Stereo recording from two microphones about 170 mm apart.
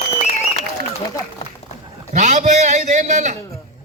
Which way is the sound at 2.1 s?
45° right (ahead or behind).